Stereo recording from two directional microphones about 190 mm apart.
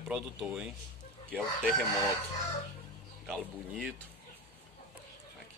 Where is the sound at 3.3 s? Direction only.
5° left (ahead or behind).